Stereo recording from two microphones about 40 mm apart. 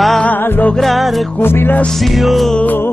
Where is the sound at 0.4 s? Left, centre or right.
Left.